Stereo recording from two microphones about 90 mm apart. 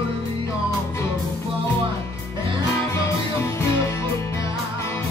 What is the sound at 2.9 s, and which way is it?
Music, 30° left (ahead or behind).